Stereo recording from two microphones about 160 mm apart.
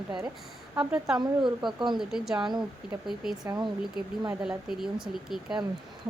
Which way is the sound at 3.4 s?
25° right (ahead or behind).